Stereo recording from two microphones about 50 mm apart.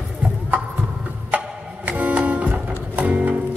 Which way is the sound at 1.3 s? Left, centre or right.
Right.